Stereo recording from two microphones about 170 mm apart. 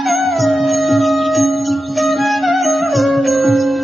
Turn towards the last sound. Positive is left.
turn(degrees=0)  # may be behind; listen again after turning